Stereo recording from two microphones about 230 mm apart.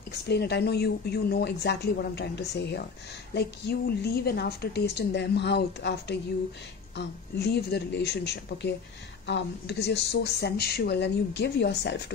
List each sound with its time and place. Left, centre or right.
0.3 s speech: left